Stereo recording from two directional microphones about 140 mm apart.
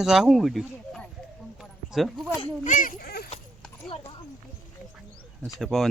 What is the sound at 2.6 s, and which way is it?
Speech, 70° left (ahead or behind).